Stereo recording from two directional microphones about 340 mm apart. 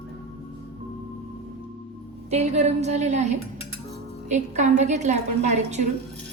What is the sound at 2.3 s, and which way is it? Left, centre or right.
A woman's voice, centre.